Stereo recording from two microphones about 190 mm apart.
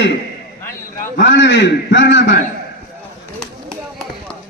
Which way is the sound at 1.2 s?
70° left (ahead or behind).